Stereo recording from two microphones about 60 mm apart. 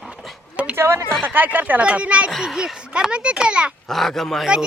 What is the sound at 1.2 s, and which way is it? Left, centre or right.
Speech, right.